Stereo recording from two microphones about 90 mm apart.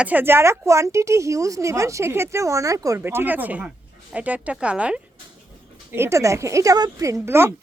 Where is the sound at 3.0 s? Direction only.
25° right (ahead or behind).